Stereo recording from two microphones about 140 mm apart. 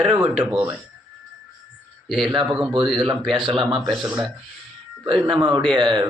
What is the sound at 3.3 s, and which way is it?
Speech, 35° right (ahead or behind).